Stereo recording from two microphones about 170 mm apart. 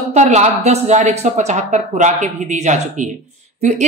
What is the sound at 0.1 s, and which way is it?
A woman's voice, 40° right (ahead or behind).